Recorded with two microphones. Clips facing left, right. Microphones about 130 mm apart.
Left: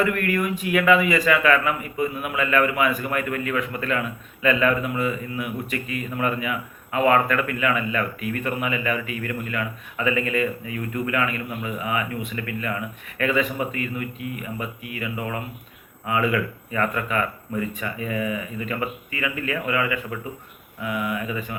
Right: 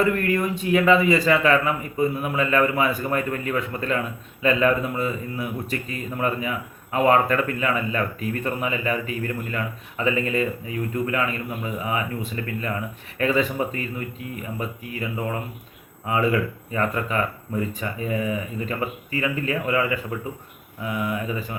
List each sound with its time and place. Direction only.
0.0 s a man's voice: 30° right (ahead or behind)